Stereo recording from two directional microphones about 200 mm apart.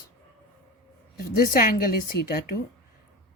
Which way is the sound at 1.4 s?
45° left (ahead or behind).